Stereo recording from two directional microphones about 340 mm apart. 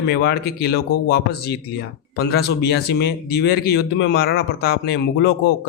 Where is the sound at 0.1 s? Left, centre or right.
Left.